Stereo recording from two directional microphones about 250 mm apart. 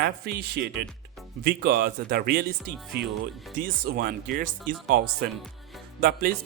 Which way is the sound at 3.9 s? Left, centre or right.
Right.